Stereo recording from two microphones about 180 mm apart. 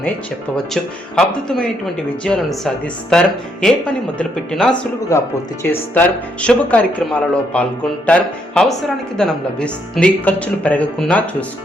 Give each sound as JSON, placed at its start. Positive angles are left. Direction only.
{"t": 0.5, "sound": "speech", "side_deg": 5}
{"t": 5.1, "sound": "speech", "side_deg": 15}